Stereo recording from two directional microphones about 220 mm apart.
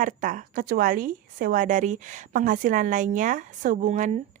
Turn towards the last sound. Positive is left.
turn(degrees=-35)  # may be behind; listen again after turning